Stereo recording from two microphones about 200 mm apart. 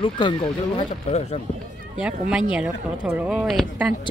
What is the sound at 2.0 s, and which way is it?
A woman's voice, 5° right (ahead or behind).